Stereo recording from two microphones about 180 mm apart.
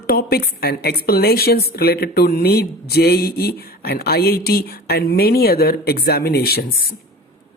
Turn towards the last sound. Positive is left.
turn(degrees=60)  # may be behind; listen again after turning